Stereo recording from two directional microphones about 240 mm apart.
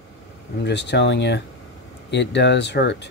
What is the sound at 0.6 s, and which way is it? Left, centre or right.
Speech, left.